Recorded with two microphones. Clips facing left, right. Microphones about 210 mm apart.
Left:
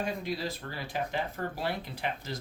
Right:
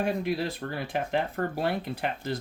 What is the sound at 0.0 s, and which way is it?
Speech, 60° right (ahead or behind).